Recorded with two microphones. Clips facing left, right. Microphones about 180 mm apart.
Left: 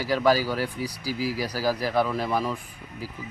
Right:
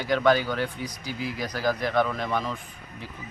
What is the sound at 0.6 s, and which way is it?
Speech, 35° left (ahead or behind).